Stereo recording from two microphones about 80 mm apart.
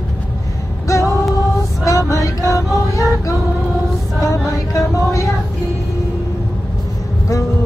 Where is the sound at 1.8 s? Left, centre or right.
Left.